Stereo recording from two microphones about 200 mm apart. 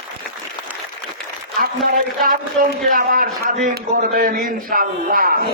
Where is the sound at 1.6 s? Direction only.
45° right (ahead or behind).